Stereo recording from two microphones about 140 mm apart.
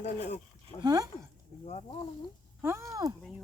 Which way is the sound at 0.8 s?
25° right (ahead or behind).